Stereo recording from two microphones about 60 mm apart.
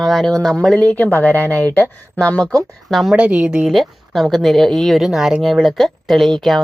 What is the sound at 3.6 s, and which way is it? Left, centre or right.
A woman's voice, centre.